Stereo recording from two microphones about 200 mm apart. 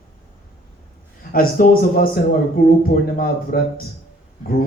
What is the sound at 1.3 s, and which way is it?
Speech, 45° left (ahead or behind).